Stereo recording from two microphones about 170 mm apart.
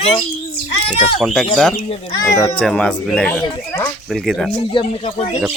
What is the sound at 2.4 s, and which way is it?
Speech, 5° left (ahead or behind).